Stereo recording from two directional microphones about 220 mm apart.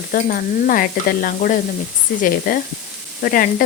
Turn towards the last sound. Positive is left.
turn(degrees=40)  # may be behind; listen again after turning